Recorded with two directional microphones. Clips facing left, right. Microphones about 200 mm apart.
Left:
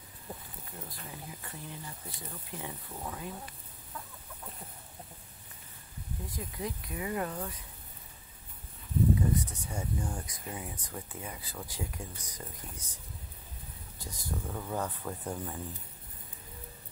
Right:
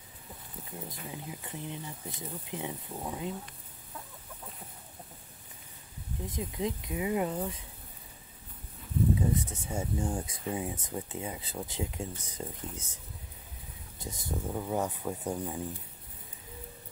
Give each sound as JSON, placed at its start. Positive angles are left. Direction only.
{"t": 0.7, "sound": "speech", "side_deg": -20}
{"t": 6.2, "sound": "speech", "side_deg": -20}
{"t": 9.3, "sound": "speech", "side_deg": -25}